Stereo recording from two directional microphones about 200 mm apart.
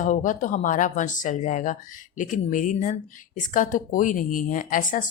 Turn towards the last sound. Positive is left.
turn(degrees=40)  # may be behind; listen again after turning